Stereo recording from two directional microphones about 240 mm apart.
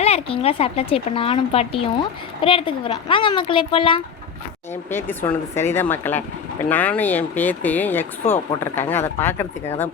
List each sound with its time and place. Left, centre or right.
0.0 s speech: left
4.7 s speech: centre